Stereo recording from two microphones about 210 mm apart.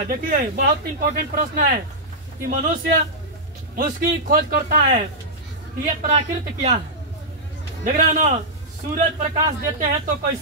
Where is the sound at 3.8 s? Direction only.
40° right (ahead or behind).